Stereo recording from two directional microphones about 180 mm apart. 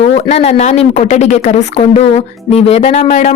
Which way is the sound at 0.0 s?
35° left (ahead or behind).